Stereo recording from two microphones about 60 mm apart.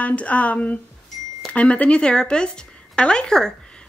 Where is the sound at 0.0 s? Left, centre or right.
Left.